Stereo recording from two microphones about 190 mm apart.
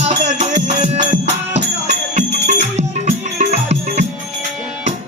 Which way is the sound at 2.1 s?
40° right (ahead or behind).